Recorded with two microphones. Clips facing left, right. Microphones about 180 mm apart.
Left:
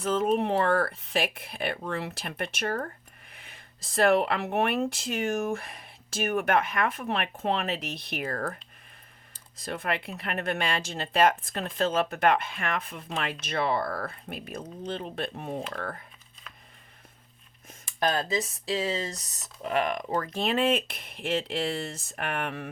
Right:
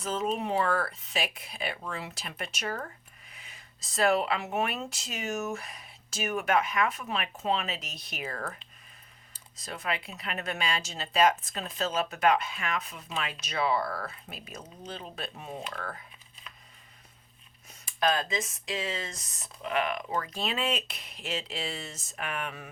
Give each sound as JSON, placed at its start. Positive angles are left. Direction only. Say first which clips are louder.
{"t": 0.0, "sound": "speech", "louder": "left 6 dB", "side_deg": 55}
{"t": 9.6, "sound": "speech", "louder": "left 3 dB", "side_deg": 55}
{"t": 17.8, "sound": "speech", "louder": "left 1 dB", "side_deg": 40}